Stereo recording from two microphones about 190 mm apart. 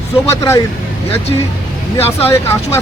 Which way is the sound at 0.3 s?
15° left (ahead or behind).